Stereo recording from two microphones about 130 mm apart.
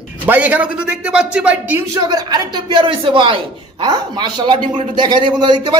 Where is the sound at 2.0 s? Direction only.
30° right (ahead or behind).